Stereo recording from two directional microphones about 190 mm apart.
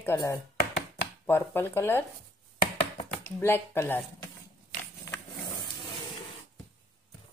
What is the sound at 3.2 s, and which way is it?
Speech, 10° left (ahead or behind).